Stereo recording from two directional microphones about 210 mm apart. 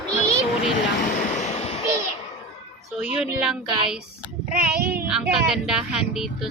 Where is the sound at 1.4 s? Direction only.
30° left (ahead or behind).